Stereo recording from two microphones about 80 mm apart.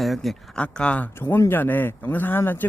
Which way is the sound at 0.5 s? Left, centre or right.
Centre.